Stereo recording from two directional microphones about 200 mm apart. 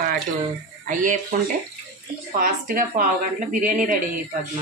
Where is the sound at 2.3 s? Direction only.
45° right (ahead or behind).